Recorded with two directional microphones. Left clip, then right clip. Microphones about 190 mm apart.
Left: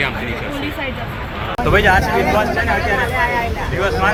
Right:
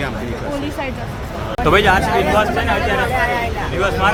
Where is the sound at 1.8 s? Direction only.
15° right (ahead or behind).